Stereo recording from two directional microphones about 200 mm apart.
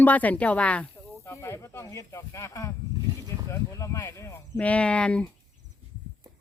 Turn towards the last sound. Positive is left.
turn(degrees=5)  # may be behind; listen again after turning